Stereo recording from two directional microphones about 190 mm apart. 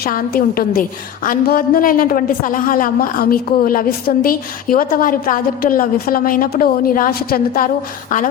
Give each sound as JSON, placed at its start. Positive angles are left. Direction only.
{"t": 0.0, "sound": "a woman's voice", "side_deg": 50}